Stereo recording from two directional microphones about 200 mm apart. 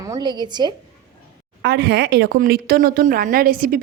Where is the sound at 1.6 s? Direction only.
55° right (ahead or behind).